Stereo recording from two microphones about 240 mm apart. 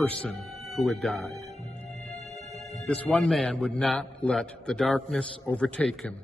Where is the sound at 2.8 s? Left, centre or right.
Centre.